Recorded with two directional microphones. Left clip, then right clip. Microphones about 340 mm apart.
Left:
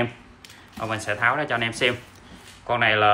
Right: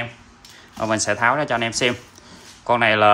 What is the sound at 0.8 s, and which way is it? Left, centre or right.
Speech, centre.